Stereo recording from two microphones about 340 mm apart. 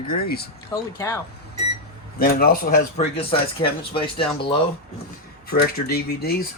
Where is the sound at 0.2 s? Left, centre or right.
Left.